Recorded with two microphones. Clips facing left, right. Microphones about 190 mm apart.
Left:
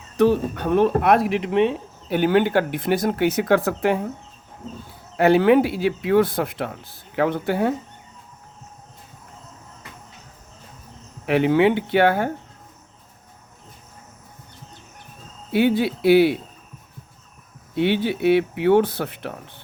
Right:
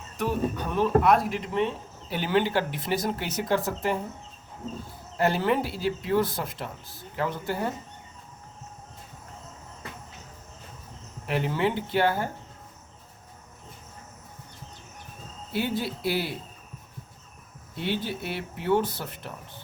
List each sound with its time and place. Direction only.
0.2 s speech: 75° left (ahead or behind)
5.1 s speech: 65° left (ahead or behind)
11.3 s speech: 70° left (ahead or behind)
15.5 s speech: 70° left (ahead or behind)
17.7 s speech: 70° left (ahead or behind)